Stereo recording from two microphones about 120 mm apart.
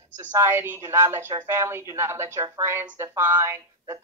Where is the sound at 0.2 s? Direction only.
20° right (ahead or behind).